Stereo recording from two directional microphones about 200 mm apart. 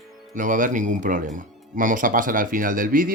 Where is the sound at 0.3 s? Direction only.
40° right (ahead or behind).